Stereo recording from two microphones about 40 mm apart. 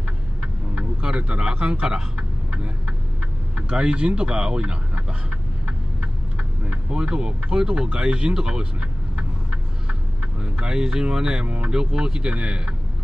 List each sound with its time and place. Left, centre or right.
0.4 s speech: right
2.1 s vehicle: right
3.6 s speech: right
9.1 s a sound: right
10.4 s speech: right